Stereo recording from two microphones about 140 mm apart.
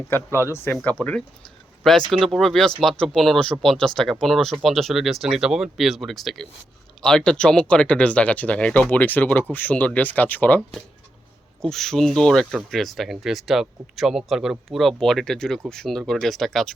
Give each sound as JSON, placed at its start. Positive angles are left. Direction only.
{"t": 0.4, "sound": "speech", "side_deg": 15}
{"t": 2.2, "sound": "speech", "side_deg": 0}